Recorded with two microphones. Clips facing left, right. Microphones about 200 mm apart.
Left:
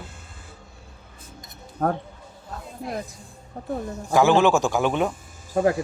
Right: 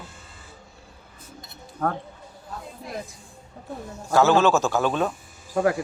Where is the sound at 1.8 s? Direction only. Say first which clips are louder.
Left 3 dB; 45° left (ahead or behind).